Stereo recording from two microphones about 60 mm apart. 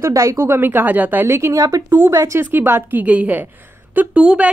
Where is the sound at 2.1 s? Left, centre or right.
Right.